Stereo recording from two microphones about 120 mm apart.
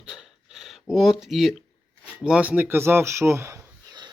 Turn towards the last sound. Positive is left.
turn(degrees=-20)  # may be behind; listen again after turning